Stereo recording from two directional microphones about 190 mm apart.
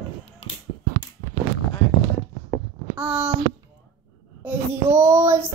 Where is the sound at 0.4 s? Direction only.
30° left (ahead or behind).